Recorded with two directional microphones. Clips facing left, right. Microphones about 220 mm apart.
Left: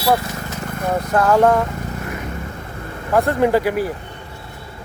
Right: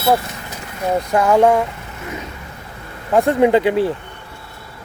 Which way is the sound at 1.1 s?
15° right (ahead or behind).